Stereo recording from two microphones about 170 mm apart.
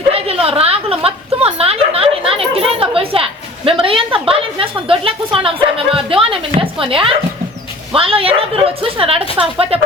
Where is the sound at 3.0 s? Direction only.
35° right (ahead or behind).